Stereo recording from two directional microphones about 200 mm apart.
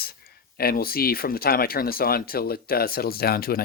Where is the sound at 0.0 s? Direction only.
50° left (ahead or behind).